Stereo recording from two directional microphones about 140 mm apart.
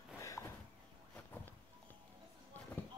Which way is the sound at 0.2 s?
20° left (ahead or behind).